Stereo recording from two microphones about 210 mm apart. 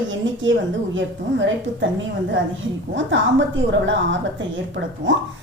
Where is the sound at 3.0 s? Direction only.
60° right (ahead or behind).